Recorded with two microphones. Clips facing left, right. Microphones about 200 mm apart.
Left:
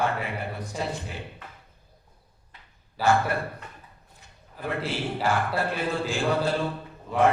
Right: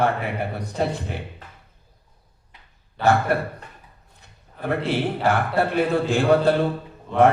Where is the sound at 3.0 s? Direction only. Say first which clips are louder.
Right 4 dB; 60° right (ahead or behind).